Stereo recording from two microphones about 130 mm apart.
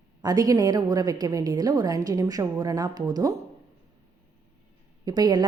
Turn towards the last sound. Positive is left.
turn(degrees=-30)  # may be behind; listen again after turning